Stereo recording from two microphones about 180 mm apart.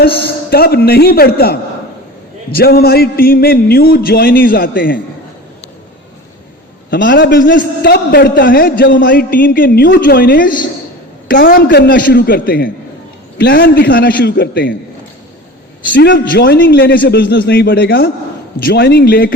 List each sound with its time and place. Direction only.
0.0 s speech: 60° left (ahead or behind)
6.9 s a man's voice: 75° left (ahead or behind)
7.3 s a man's voice: 50° left (ahead or behind); by 14.8 s 70° left (ahead or behind)
15.9 s speech: 80° left
16.1 s speech: 55° left (ahead or behind)